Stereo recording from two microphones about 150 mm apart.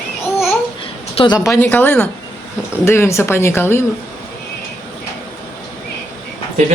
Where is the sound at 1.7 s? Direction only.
15° left (ahead or behind).